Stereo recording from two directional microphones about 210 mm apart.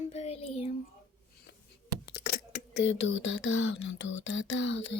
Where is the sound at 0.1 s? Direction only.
30° left (ahead or behind).